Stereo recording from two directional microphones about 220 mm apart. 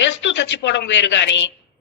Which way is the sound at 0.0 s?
55° left (ahead or behind).